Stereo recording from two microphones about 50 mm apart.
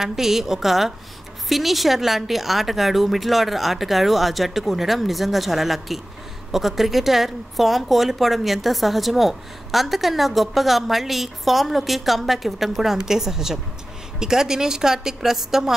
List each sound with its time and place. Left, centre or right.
0.0 s a woman's voice: centre